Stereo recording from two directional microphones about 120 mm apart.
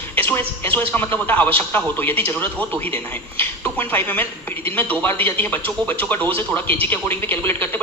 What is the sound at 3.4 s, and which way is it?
Speech, 15° left (ahead or behind).